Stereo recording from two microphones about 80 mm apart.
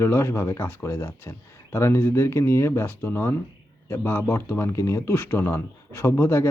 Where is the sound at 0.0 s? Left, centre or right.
Left.